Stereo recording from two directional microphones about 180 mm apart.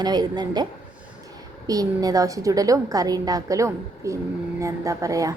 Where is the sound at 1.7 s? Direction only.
20° right (ahead or behind).